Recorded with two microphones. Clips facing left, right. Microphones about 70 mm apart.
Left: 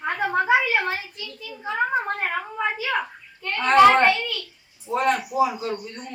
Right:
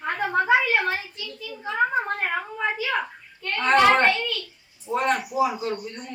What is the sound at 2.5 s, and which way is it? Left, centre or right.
A child's voice, centre.